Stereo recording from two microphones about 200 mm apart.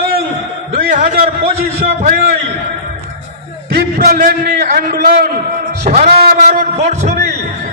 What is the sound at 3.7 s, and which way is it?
A man's voice, 50° right (ahead or behind).